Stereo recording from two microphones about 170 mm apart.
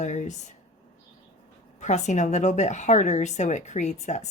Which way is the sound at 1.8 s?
45° left (ahead or behind).